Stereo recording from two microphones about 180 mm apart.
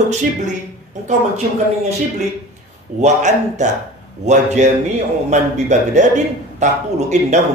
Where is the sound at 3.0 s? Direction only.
40° right (ahead or behind).